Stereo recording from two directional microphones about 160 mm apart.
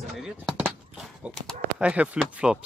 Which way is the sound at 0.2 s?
5° right (ahead or behind).